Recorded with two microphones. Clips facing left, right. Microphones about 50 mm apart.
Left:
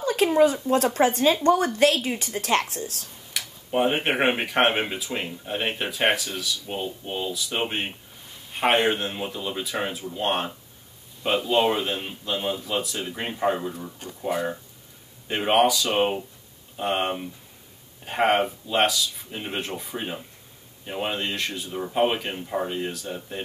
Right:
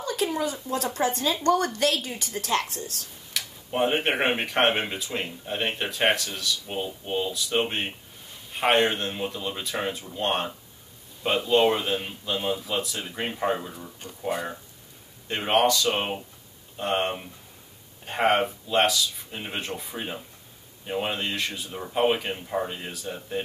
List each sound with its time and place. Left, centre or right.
0.0 s speech: left
1.4 s speech: centre
2.2 s speech: left
3.3 s speech: centre